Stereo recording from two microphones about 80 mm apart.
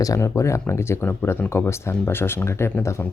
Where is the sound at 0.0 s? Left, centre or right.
Left.